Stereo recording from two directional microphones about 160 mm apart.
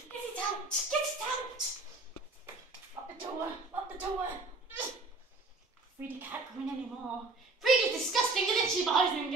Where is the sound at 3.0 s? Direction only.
20° right (ahead or behind).